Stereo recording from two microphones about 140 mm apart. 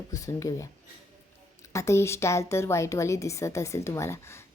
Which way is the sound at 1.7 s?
20° left (ahead or behind).